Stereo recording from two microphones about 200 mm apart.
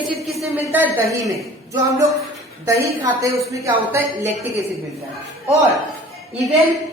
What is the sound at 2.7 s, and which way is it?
A woman's voice, 15° right (ahead or behind).